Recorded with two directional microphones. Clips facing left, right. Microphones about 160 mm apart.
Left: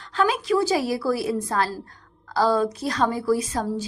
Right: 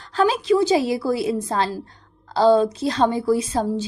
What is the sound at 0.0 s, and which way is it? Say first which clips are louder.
A woman's voice: right 3 dB; 35° right (ahead or behind).